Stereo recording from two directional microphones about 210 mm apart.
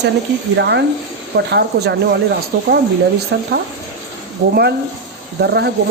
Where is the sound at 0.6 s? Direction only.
55° right (ahead or behind).